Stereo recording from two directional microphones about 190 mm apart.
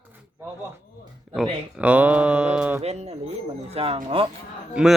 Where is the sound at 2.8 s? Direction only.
35° right (ahead or behind).